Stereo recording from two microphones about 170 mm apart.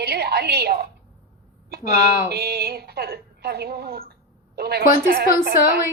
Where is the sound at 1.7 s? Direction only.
65° right (ahead or behind).